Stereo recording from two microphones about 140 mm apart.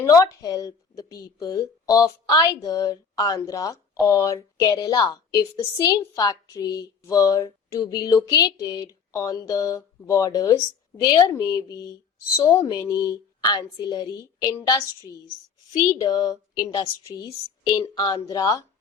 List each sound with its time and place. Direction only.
0.0 s a woman's voice: 25° left (ahead or behind)
15.7 s a woman's voice: 30° left (ahead or behind)